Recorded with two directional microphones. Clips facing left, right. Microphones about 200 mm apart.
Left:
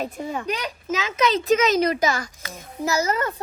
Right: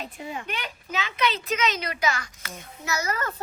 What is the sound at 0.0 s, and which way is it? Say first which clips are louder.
Speech: left 7 dB; 40° left (ahead or behind).